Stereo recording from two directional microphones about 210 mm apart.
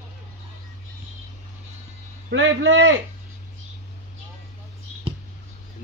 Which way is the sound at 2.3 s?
65° right (ahead or behind).